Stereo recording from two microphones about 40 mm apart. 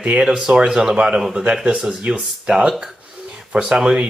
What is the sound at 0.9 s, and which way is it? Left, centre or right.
Speech, right.